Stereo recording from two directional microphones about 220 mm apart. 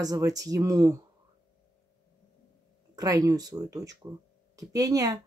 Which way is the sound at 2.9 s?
15° right (ahead or behind).